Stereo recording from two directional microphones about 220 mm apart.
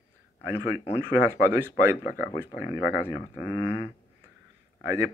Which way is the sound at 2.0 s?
40° left (ahead or behind).